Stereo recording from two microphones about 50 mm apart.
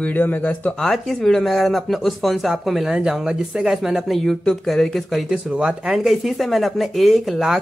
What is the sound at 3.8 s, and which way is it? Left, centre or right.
Speech, centre.